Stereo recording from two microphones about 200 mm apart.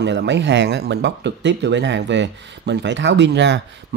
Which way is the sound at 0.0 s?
60° right (ahead or behind).